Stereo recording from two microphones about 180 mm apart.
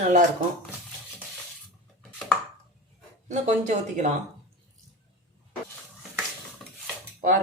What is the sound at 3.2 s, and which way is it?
Speech, 40° right (ahead or behind).